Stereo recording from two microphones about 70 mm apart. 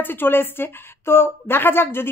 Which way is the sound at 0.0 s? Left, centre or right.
Left.